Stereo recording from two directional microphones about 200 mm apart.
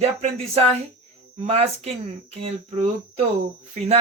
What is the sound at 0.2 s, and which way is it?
Speech, 30° right (ahead or behind).